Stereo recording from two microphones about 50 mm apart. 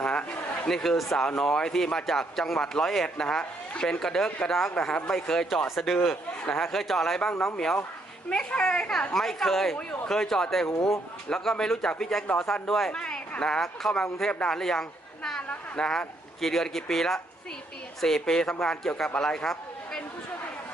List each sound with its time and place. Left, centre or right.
0.0 s a sound: left
0.7 s speech: centre
5.6 s speech: centre
9.1 s speech: centre
12.9 s a sound: centre
13.4 s speech: centre
15.4 s speech: left
15.9 s speech: centre
19.2 s a sound: centre